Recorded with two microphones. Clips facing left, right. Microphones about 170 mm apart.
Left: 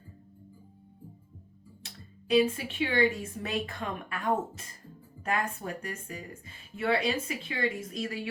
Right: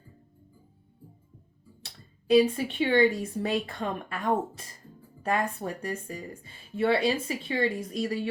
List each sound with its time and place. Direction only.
1.8 s speech: 35° right (ahead or behind)